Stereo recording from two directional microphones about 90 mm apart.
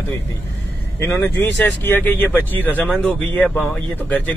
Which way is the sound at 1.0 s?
30° left (ahead or behind).